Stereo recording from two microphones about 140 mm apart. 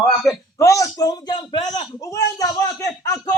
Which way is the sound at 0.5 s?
20° left (ahead or behind).